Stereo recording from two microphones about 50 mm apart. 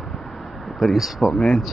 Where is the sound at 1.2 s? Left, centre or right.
Centre.